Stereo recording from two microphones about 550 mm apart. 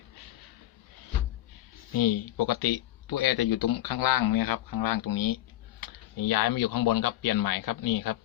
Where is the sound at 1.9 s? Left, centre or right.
Left.